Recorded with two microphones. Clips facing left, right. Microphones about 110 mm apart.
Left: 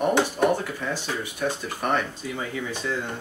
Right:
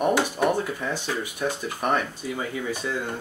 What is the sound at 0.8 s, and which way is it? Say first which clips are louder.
Speech: right 1 dB; 15° right (ahead or behind).